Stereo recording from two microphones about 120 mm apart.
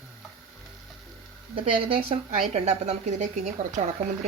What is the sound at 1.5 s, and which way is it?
A woman's voice, 50° right (ahead or behind).